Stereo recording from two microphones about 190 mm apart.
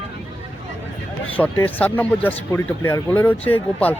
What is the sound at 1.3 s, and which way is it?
Speech, 10° left (ahead or behind).